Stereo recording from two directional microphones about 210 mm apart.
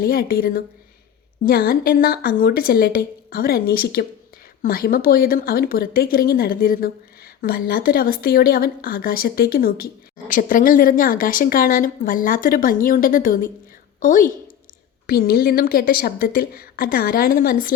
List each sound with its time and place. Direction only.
0.0 s a woman's voice: 45° left (ahead or behind)